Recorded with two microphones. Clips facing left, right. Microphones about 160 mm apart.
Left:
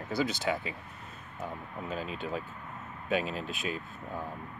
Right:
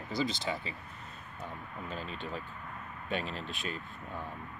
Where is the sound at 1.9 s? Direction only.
5° left (ahead or behind).